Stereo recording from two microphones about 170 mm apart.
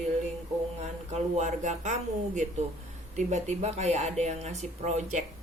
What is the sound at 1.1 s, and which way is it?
Speech, 45° right (ahead or behind).